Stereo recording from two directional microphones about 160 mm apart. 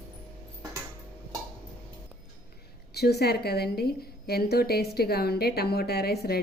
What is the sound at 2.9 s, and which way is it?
A woman's voice, 90° left.